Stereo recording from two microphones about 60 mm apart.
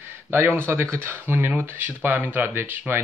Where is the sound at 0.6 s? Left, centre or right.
Right.